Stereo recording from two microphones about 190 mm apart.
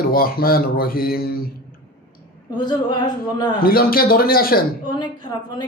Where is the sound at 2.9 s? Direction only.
20° left (ahead or behind).